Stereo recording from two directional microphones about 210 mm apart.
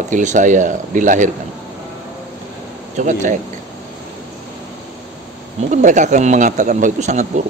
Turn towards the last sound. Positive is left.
turn(degrees=-35)  # may be behind; listen again after turning